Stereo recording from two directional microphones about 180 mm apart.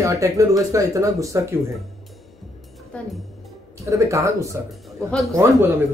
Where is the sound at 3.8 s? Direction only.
15° right (ahead or behind).